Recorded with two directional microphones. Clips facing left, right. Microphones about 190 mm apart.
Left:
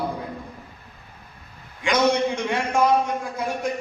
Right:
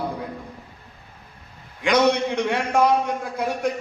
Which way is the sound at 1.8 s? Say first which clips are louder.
Right 1 dB; 60° right (ahead or behind).